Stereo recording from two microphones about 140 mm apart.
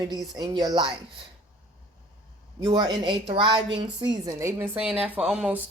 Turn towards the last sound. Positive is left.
turn(degrees=-10)  # may be behind; listen again after turning